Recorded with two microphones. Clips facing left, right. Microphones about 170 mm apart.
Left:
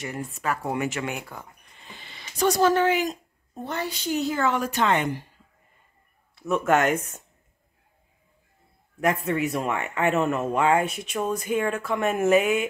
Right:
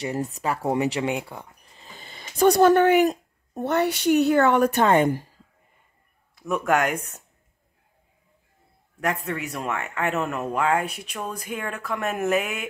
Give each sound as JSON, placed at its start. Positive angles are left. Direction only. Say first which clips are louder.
{"t": 0.0, "sound": "speech", "louder": "right 4 dB", "side_deg": -35}
{"t": 1.6, "sound": "speech", "louder": "right 1 dB", "side_deg": -40}
{"t": 6.7, "sound": "speech", "louder": "left 1 dB", "side_deg": -10}
{"t": 9.0, "sound": "speech", "louder": "left 4 dB", "side_deg": 0}